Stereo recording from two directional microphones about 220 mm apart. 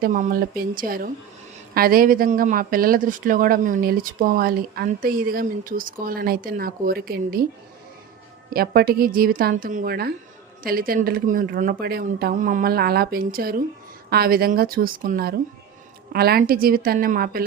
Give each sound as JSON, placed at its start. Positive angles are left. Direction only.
{"t": 0.0, "sound": "speech", "side_deg": -35}
{"t": 8.5, "sound": "speech", "side_deg": -45}